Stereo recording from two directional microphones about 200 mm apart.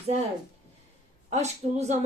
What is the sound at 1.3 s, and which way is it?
Speech, 35° right (ahead or behind).